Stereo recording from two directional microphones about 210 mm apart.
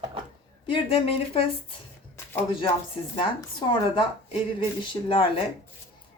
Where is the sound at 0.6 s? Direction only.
25° left (ahead or behind).